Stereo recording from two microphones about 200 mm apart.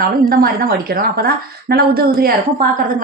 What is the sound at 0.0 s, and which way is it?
A woman's voice, 45° right (ahead or behind).